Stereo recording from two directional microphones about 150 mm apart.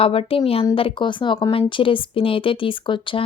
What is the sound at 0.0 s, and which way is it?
A woman's voice, 40° left (ahead or behind).